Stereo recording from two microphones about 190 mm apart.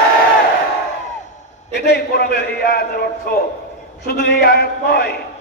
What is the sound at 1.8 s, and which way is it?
A man's voice, 60° left (ahead or behind).